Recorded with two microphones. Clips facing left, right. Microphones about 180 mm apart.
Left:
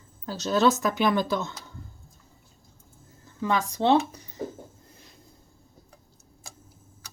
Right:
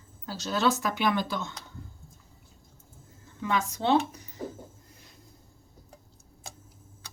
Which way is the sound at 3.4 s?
35° left (ahead or behind).